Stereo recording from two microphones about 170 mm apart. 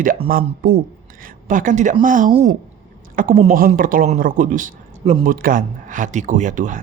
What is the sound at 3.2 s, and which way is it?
Speech, 55° right (ahead or behind).